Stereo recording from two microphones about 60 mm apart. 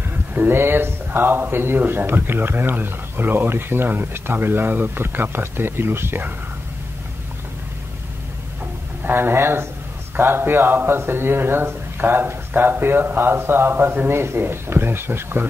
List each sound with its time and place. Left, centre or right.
0.3 s a man's voice: right
9.0 s a man's voice: right